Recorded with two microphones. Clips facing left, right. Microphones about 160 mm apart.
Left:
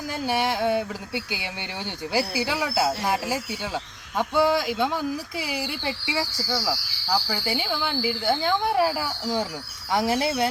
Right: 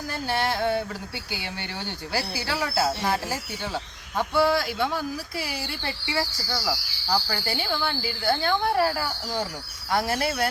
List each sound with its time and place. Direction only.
0.3 s speech: 15° left (ahead or behind)